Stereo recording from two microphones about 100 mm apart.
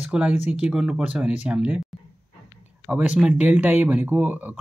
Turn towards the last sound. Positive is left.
turn(degrees=-15)  # may be behind; listen again after turning